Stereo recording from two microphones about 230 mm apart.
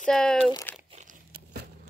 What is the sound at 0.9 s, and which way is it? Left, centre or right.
Crumpling, right.